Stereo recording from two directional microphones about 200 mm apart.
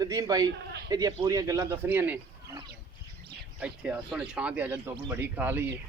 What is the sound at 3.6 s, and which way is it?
Speech, 5° right (ahead or behind).